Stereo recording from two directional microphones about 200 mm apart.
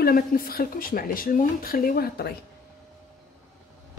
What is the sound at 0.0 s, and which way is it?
Speech, 45° left (ahead or behind).